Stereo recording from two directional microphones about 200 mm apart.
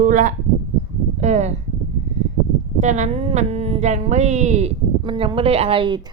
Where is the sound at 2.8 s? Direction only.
35° right (ahead or behind).